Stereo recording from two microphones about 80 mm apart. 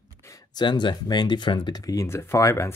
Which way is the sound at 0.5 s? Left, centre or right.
Left.